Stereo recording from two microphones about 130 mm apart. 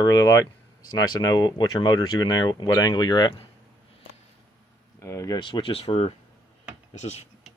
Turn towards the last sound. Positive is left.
turn(degrees=55)  # may be behind; listen again after turning